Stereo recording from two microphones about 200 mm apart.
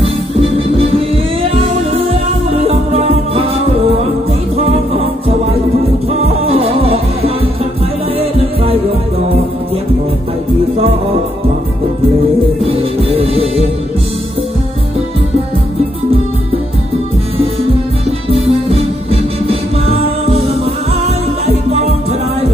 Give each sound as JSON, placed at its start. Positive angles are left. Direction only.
{"t": 2.0, "sound": "music", "side_deg": -30}
{"t": 6.1, "sound": "music", "side_deg": -30}
{"t": 12.6, "sound": "music", "side_deg": -30}
{"t": 21.4, "sound": "music", "side_deg": -30}